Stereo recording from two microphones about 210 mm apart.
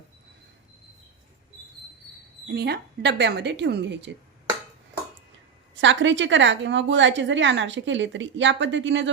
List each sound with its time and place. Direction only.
2.5 s a woman's voice: 50° right (ahead or behind)
5.8 s a woman's voice: 60° right (ahead or behind)